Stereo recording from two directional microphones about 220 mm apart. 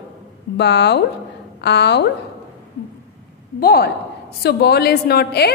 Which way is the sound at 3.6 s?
45° left (ahead or behind).